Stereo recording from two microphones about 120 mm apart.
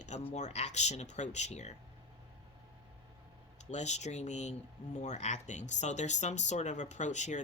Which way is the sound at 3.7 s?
70° left (ahead or behind).